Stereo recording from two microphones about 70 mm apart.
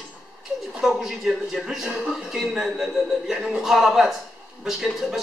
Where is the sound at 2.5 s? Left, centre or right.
Centre.